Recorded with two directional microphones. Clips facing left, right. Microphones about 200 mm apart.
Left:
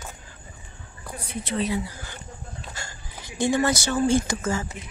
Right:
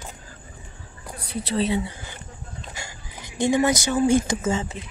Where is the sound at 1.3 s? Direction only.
35° right (ahead or behind).